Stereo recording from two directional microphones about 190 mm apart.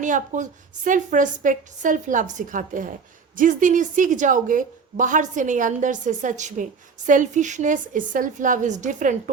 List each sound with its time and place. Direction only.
0.0 s a woman's voice: 40° right (ahead or behind)